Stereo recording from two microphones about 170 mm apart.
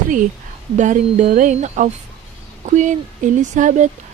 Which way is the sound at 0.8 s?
45° right (ahead or behind).